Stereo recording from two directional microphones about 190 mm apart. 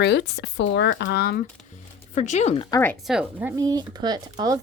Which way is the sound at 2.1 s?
40° left (ahead or behind).